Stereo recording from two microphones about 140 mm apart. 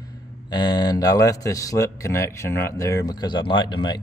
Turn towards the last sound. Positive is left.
turn(degrees=35)  # may be behind; listen again after turning